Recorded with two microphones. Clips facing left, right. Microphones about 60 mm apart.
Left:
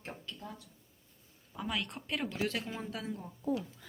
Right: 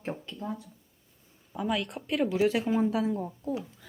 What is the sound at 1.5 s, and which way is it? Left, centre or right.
A woman's voice, centre.